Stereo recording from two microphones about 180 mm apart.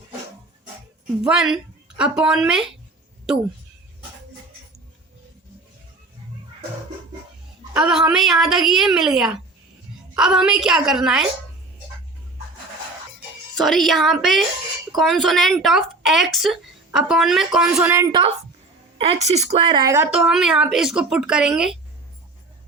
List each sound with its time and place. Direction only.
1.2 s speech: 5° right (ahead or behind)
7.7 s speech: 5° right (ahead or behind)
13.6 s speech: centre (ahead or behind)
18.1 s a woman's voice: 30° right (ahead or behind)
20.1 s speech: 5° right (ahead or behind)